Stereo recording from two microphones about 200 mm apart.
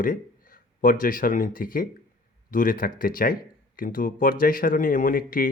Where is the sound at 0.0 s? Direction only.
45° left (ahead or behind).